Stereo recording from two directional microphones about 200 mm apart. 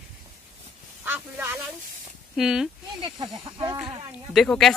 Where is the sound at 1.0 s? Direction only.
10° right (ahead or behind).